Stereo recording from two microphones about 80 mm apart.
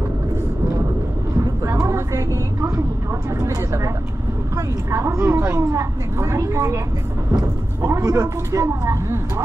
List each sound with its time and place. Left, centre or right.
1.4 s vehicle: right
3.4 s a woman's voice: right
4.9 s a woman's voice: right